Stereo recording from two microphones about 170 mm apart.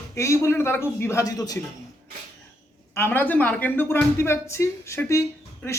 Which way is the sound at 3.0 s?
10° left (ahead or behind).